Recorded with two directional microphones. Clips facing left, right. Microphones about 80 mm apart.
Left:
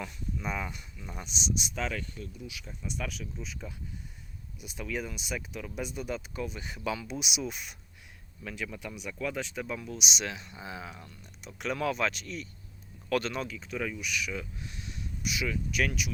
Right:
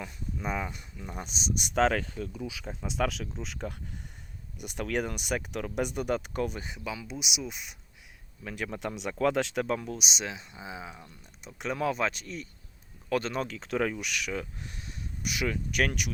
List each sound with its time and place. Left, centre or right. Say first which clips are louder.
0.3 s speech: right 2 dB; right
1.2 s speech: even; right
1.6 s speech: right 9 dB; right
3.4 s speech: right 4 dB; right
6.8 s speech: left 5 dB; centre
8.5 s speech: right 4 dB; right
9.0 s speech: right 8 dB; right
9.6 s speech: right 5 dB; right
10.2 s speech: even; right
13.5 s speech: right 6 dB; right
14.3 s speech: right 3 dB; right